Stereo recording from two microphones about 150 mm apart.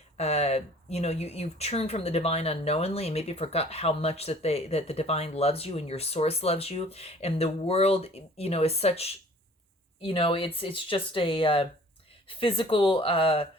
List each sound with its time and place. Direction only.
0.2 s speech: 45° left (ahead or behind)